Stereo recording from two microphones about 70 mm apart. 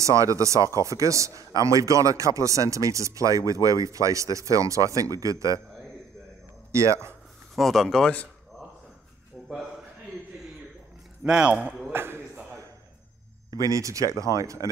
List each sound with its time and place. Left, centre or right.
0.0 s a man's voice: right
6.7 s speech: right
7.5 s speech: centre
9.5 s a man's voice: centre
11.2 s a man's voice: centre
11.9 s a sound: right
13.5 s a man's voice: right